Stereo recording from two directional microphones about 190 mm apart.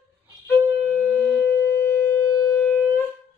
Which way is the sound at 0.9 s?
5° left (ahead or behind).